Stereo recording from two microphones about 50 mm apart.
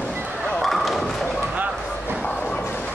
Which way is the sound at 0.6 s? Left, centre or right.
Centre.